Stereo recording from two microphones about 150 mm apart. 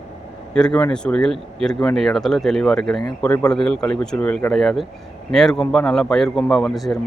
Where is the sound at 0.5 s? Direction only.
5° left (ahead or behind).